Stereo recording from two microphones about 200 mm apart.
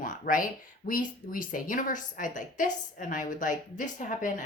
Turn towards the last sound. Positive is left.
turn(degrees=40)  # may be behind; listen again after turning